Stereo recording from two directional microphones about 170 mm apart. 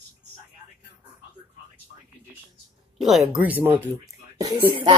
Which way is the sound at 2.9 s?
Centre (ahead or behind).